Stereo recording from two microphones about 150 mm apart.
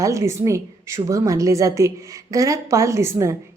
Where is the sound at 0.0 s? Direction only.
20° right (ahead or behind).